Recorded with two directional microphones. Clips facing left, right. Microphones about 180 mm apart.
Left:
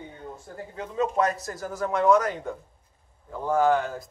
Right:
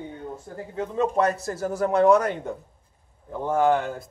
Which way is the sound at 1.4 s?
30° right (ahead or behind).